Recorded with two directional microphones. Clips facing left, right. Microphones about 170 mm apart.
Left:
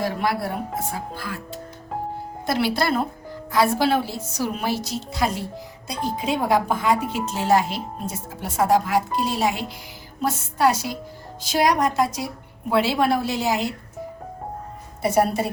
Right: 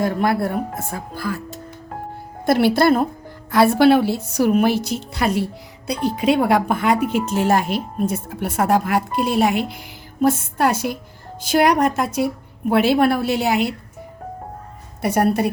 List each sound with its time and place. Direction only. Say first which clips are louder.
0.0 s speech: right 5 dB; 50° right (ahead or behind)
2.5 s speech: right 7 dB; 55° right (ahead or behind)
3.5 s speech: right 6 dB; 65° right (ahead or behind)
15.0 s speech: right 2 dB; 60° right (ahead or behind)